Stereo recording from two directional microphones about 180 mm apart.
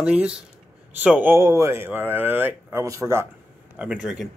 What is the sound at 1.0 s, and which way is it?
Speech, 10° right (ahead or behind).